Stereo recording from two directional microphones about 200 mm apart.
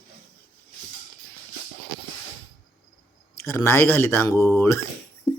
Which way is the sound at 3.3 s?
15° left (ahead or behind).